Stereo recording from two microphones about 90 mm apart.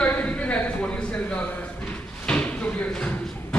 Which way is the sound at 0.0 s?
15° left (ahead or behind).